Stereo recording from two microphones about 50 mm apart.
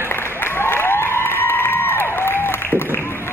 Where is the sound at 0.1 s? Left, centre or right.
Left.